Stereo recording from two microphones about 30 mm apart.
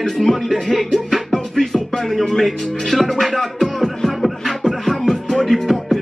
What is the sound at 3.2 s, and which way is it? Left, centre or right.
Music, centre.